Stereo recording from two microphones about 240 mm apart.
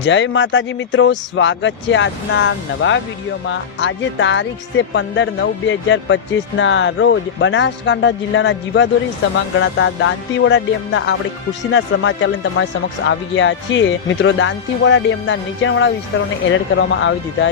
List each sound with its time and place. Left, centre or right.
0.0 s speech: left